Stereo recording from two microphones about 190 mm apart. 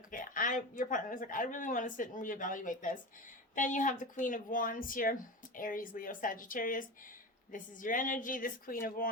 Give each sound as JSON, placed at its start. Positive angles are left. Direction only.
{"t": 0.1, "sound": "speech", "side_deg": 45}